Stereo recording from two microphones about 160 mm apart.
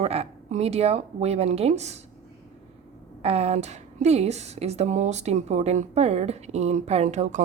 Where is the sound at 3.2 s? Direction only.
40° right (ahead or behind).